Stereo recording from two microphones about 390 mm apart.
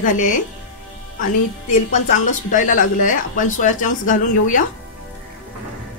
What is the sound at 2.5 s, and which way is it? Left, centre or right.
Speech, centre.